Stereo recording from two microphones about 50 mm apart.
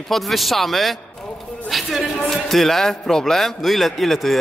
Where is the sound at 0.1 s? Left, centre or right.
Centre.